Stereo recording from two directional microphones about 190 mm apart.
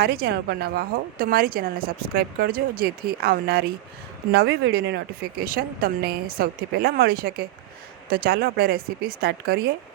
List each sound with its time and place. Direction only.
0.0 s a woman's voice: 55° right (ahead or behind)
5.5 s a woman's voice: 50° right (ahead or behind)